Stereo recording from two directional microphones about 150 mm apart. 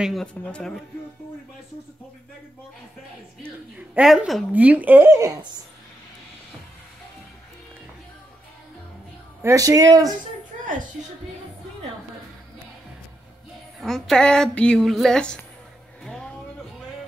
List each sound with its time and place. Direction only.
0.0 s speech: centre (ahead or behind)
3.7 s speech: 5° right (ahead or behind)
9.4 s speech: 20° right (ahead or behind)
10.6 s a sound: 60° right (ahead or behind)
13.7 s speech: centre (ahead or behind)
16.0 s a sound: 5° left (ahead or behind)